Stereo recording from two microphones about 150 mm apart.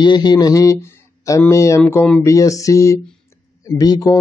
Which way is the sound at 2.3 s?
20° left (ahead or behind).